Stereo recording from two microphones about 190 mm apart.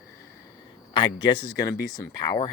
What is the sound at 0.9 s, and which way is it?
Speech, 25° left (ahead or behind).